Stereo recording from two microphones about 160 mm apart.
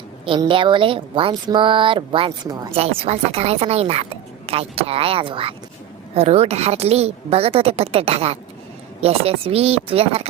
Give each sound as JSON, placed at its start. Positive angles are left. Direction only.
{"t": 0.3, "sound": "speech", "side_deg": -30}